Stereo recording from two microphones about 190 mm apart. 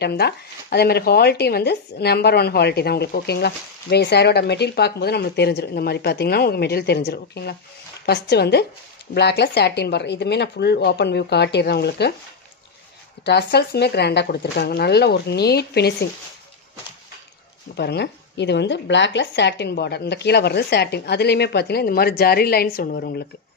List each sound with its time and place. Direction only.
0.0 s speech: 60° left (ahead or behind)
13.2 s speech: 60° left (ahead or behind)
17.7 s speech: 60° left (ahead or behind)